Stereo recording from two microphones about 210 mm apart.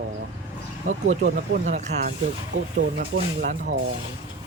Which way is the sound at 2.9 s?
45° right (ahead or behind).